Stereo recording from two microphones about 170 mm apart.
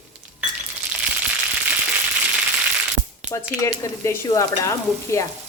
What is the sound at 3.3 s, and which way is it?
Speech, 15° left (ahead or behind).